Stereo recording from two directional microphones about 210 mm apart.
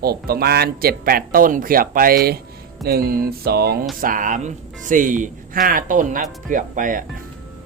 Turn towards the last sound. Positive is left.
turn(degrees=-40)  # may be behind; listen again after turning